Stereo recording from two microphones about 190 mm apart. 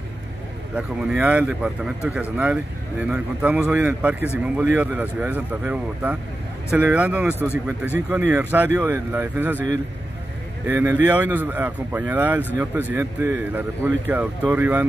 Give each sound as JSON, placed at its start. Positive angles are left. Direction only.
{"t": 0.7, "sound": "speech", "side_deg": -5}
{"t": 10.7, "sound": "speech", "side_deg": -10}